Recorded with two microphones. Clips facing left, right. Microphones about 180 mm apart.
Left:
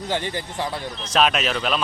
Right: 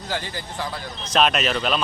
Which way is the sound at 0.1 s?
20° left (ahead or behind).